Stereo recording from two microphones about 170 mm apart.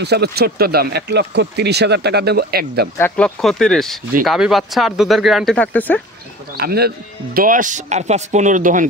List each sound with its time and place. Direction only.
0.0 s speech: 75° right (ahead or behind)
3.0 s speech: 10° left (ahead or behind)
6.5 s speech: 65° right (ahead or behind)
7.3 s speech: 55° right (ahead or behind)